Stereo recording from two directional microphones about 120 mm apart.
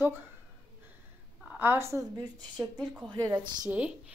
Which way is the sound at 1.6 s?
20° right (ahead or behind).